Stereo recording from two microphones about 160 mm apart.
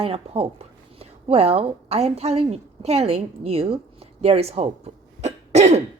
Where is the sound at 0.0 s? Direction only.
35° right (ahead or behind).